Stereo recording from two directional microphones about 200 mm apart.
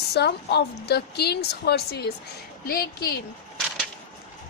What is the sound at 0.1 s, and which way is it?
A woman's voice, 55° left (ahead or behind).